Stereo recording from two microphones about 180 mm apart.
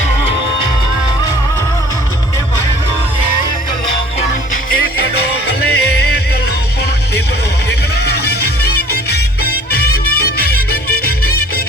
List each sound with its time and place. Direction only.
5.5 s music: 60° left (ahead or behind)
8.1 s music: 65° left (ahead or behind)